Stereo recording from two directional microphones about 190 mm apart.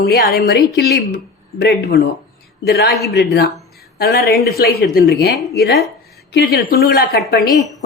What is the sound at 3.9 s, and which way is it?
Speech, 50° left (ahead or behind).